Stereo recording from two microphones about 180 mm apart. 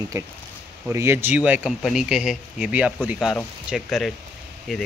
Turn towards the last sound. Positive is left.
turn(degrees=0)  # may be behind; listen again after turning